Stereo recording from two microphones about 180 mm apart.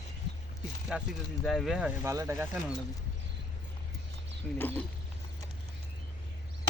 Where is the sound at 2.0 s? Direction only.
15° right (ahead or behind).